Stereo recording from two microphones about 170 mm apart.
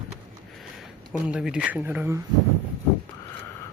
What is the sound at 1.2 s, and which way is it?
Speech, 5° right (ahead or behind).